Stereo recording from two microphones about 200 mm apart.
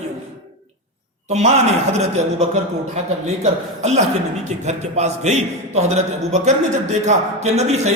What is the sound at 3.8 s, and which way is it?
A woman's voice, 35° right (ahead or behind).